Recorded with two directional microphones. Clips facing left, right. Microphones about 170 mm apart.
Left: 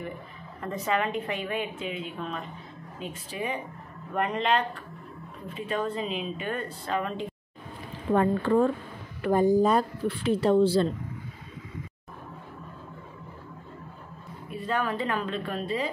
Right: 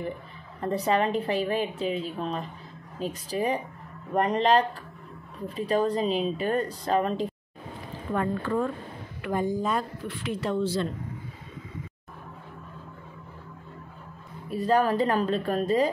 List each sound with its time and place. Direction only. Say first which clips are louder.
0.6 s a woman's voice: right 4 dB; 35° right (ahead or behind)
8.1 s speech: left 5 dB; 30° left (ahead or behind)
14.5 s a woman's voice: right 6 dB; 40° right (ahead or behind)